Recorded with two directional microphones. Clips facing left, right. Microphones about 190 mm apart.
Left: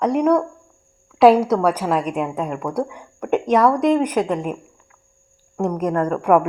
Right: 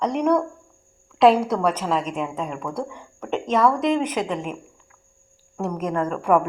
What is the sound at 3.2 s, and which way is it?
Speech, 65° left (ahead or behind).